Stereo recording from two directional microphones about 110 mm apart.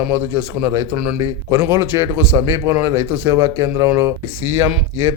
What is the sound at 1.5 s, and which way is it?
A man's voice, 25° right (ahead or behind).